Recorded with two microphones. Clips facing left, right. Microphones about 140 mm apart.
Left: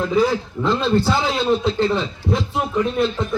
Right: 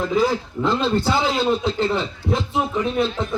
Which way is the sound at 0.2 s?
Centre (ahead or behind).